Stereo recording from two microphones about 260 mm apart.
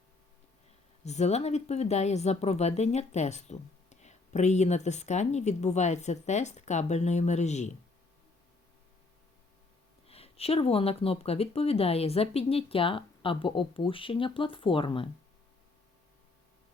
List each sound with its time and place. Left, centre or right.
1.0 s speech: left
10.1 s speech: left